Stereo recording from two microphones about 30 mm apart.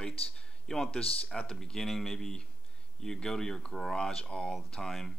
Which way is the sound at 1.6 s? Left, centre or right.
Centre.